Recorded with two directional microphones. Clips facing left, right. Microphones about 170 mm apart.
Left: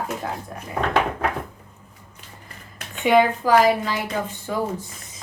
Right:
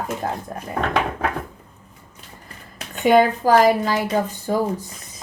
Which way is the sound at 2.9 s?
45° right (ahead or behind).